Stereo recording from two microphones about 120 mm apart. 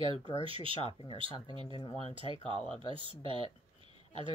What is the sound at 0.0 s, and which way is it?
Speech, 45° right (ahead or behind).